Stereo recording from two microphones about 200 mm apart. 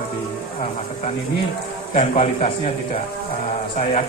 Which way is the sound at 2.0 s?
35° left (ahead or behind).